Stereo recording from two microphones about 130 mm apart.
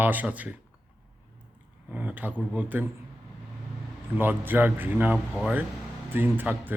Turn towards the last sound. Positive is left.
turn(degrees=-15)  # may be behind; listen again after turning